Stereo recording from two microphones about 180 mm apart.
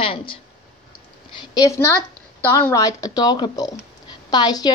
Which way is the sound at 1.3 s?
20° left (ahead or behind).